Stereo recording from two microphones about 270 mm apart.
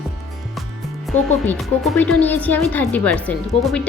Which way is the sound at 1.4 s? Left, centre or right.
Centre.